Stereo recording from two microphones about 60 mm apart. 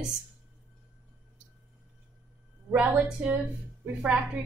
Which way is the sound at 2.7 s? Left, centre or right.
Centre.